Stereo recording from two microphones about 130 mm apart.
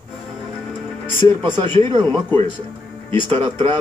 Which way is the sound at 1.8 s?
35° right (ahead or behind).